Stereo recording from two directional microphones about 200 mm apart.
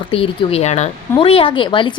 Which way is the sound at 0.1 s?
30° left (ahead or behind).